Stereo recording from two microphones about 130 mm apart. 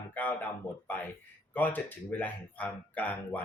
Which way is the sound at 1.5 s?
15° left (ahead or behind).